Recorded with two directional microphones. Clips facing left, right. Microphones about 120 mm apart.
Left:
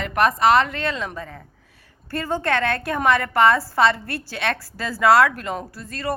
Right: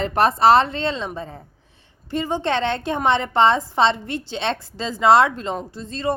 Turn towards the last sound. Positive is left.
turn(degrees=-20)  # may be behind; listen again after turning